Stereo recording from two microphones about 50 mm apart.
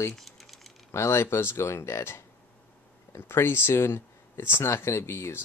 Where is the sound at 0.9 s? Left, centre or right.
Left.